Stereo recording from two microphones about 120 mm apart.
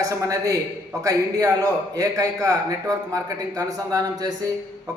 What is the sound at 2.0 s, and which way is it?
A man's voice, 30° right (ahead or behind).